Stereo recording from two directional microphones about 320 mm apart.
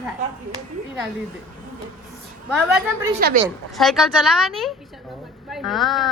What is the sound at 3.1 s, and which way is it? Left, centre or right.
Speech, right.